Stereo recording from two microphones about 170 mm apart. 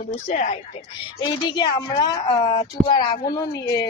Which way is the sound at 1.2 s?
25° left (ahead or behind).